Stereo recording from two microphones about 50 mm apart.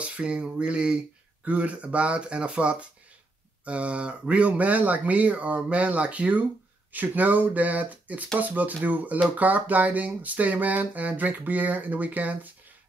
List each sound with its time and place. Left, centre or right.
0.0 s speech: right